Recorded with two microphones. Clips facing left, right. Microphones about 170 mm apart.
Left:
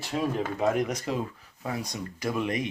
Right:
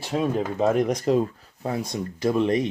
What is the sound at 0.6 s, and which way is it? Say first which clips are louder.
Speech: right 6 dB; 35° right (ahead or behind).